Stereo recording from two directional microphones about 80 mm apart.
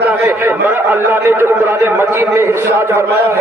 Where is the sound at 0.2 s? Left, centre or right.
Right.